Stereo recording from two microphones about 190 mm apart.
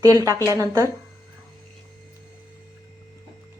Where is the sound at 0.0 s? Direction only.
15° right (ahead or behind).